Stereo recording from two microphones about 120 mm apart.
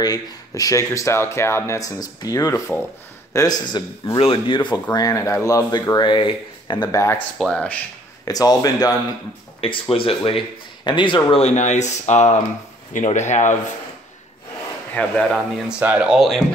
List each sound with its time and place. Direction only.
0.0 s speech: 30° left (ahead or behind)
4.2 s speech: 45° left (ahead or behind)
4.9 s speech: 30° left (ahead or behind)
7.0 s speech: 20° left (ahead or behind)
7.3 s speech: centre (ahead or behind)
8.3 s speech: 30° left (ahead or behind)
9.6 s speech: 50° left (ahead or behind)
10.8 s speech: 40° left (ahead or behind)
11.4 s speech: 75° left (ahead or behind)
15.0 s speech: 10° left (ahead or behind)
15.8 s speech: 15° right (ahead or behind)
16.2 s speech: centre (ahead or behind)